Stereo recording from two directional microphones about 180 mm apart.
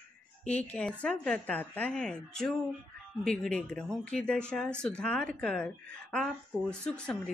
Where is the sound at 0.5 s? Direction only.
5° left (ahead or behind).